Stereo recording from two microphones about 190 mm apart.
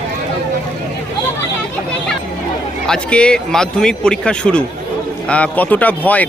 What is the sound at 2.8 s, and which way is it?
Speech, 5° left (ahead or behind).